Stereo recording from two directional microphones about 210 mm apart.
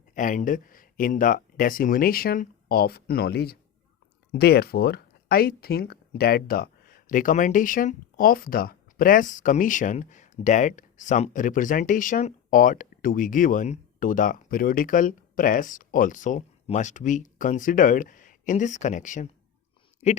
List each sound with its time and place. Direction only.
0.1 s speech: 40° left (ahead or behind)